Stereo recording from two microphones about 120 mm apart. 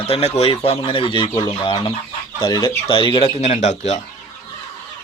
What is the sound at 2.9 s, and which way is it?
Speech, 45° left (ahead or behind).